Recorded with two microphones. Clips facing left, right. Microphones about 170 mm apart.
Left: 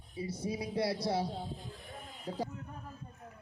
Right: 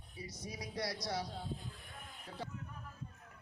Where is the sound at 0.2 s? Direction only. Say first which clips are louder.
Left 10 dB; 30° left (ahead or behind).